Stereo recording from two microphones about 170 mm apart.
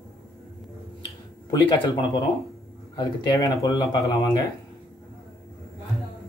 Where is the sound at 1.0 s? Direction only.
25° left (ahead or behind).